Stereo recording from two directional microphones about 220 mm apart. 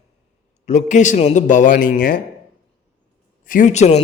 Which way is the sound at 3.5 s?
35° left (ahead or behind).